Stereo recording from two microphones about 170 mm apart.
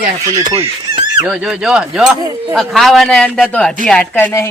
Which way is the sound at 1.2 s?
5° right (ahead or behind).